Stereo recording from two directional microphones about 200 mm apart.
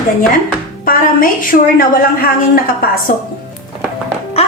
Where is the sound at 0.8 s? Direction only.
45° left (ahead or behind).